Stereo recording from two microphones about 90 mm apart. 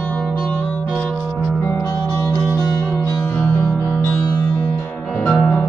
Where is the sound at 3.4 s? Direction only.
25° left (ahead or behind).